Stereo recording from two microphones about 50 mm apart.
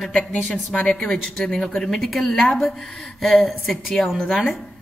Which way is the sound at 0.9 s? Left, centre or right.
Centre.